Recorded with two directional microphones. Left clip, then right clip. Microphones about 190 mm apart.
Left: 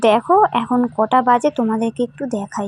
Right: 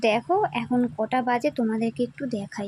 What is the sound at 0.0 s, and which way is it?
Speech, 15° left (ahead or behind).